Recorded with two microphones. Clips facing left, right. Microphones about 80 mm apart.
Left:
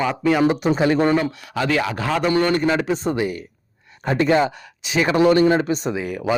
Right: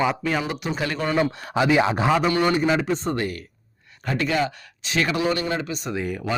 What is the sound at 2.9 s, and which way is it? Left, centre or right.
Speech, centre.